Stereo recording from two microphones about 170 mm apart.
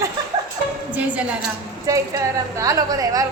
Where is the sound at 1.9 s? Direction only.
20° right (ahead or behind).